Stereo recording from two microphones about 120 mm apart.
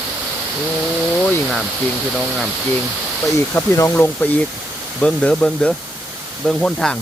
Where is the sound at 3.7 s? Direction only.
25° left (ahead or behind).